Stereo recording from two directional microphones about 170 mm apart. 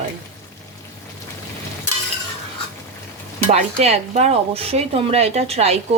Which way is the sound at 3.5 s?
40° right (ahead or behind).